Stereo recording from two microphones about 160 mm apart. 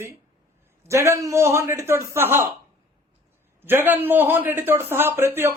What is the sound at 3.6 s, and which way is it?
Speech, 15° right (ahead or behind).